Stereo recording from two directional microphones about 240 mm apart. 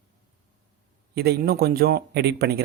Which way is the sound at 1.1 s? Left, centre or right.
Right.